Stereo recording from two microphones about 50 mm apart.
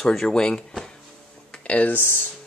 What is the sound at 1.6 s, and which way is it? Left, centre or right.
Speech, left.